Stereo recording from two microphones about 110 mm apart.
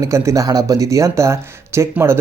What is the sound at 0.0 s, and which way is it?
Speech, 25° right (ahead or behind).